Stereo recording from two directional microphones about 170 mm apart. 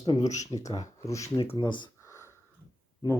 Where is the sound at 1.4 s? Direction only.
30° left (ahead or behind).